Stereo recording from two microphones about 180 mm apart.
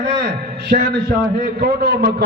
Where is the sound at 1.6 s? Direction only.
60° right (ahead or behind).